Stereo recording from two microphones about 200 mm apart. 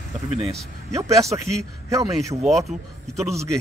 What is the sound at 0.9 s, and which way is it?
A man's voice, 15° right (ahead or behind).